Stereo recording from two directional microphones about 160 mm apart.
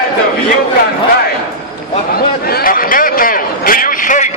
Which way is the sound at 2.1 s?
70° left (ahead or behind).